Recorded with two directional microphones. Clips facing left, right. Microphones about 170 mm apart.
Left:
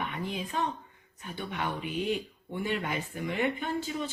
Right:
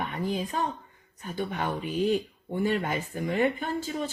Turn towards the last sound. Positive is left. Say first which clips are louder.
# right 2 dB
turn(degrees=-40)  # may be behind; listen again after turning